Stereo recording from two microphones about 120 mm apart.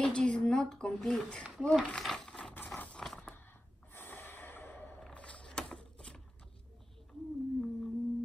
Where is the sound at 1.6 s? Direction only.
5° left (ahead or behind).